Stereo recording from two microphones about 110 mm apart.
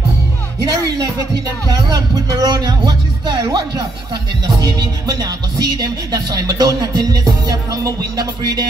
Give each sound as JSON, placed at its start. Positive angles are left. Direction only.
{"t": 0.6, "sound": "speech", "side_deg": -35}
{"t": 1.7, "sound": "music", "side_deg": -35}